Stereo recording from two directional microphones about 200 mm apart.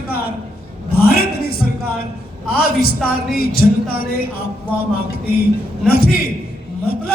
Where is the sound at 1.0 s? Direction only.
50° left (ahead or behind).